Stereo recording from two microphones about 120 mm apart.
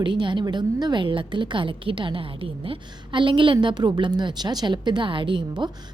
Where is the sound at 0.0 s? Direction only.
40° right (ahead or behind).